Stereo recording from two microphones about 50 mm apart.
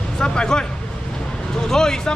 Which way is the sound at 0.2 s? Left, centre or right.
Centre.